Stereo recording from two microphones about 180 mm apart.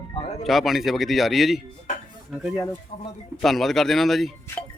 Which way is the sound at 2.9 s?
45° left (ahead or behind).